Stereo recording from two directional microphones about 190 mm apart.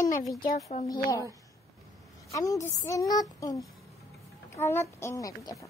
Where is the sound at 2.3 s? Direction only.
15° left (ahead or behind).